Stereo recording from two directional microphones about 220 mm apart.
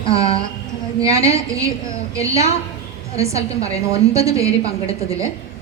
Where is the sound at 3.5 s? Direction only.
25° left (ahead or behind).